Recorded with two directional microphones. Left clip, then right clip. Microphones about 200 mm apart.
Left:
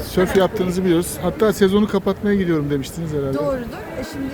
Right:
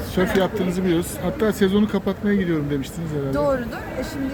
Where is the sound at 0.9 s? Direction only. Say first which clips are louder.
Left 5 dB; 30° left (ahead or behind).